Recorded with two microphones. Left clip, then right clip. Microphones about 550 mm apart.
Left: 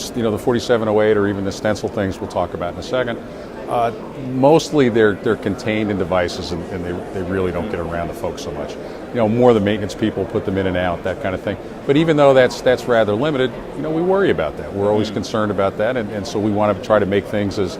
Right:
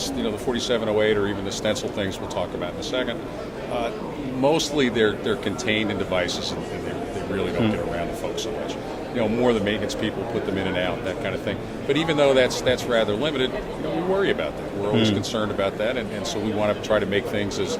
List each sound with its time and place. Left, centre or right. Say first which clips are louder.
0.2 s a man's voice: left 10 dB; left
4.4 s a man's voice: left 8 dB; left
9.1 s a man's voice: left 8 dB; left